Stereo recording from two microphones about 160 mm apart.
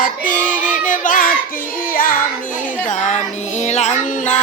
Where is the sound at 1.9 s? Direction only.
60° left (ahead or behind).